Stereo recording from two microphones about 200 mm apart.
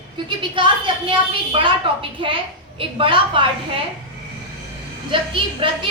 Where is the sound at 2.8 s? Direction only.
25° right (ahead or behind).